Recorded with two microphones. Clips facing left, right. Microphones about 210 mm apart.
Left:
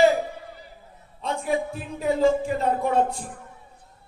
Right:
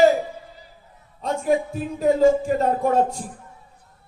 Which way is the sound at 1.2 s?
45° right (ahead or behind).